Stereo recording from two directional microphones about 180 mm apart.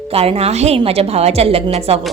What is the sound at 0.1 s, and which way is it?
A woman's voice, 35° right (ahead or behind).